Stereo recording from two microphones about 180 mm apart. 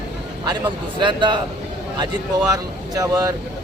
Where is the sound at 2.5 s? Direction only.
20° right (ahead or behind).